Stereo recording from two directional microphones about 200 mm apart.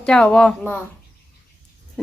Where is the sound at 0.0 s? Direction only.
5° left (ahead or behind).